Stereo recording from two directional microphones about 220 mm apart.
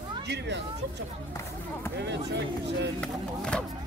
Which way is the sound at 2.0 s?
50° right (ahead or behind).